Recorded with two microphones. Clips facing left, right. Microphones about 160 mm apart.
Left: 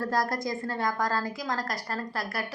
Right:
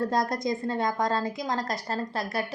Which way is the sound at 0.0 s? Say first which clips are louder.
Right 2 dB; 20° right (ahead or behind).